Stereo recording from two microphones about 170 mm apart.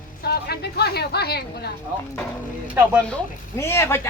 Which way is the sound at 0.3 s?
70° left (ahead or behind).